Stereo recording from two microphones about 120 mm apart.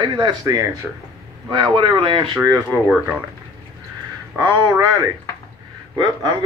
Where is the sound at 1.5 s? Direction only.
45° right (ahead or behind).